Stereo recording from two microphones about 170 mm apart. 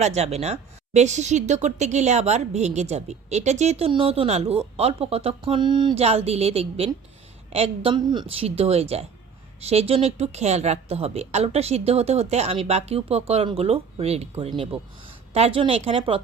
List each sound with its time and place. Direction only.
0.0 s speech: 40° right (ahead or behind)